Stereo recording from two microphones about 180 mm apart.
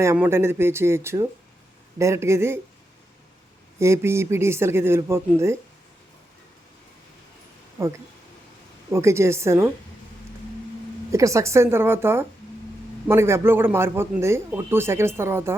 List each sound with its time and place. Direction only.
0.0 s a man's voice: 15° right (ahead or behind)
3.8 s a man's voice: 15° right (ahead or behind)
7.8 s a man's voice: 15° right (ahead or behind)
11.1 s a man's voice: 15° right (ahead or behind)